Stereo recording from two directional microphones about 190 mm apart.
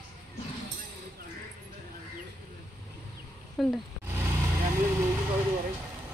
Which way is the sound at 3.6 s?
Centre (ahead or behind).